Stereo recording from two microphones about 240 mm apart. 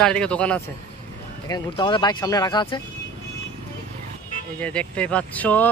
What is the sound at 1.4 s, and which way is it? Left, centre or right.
Speech, centre.